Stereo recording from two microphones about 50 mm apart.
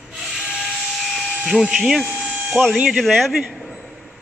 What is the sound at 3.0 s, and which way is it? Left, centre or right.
Speech, centre.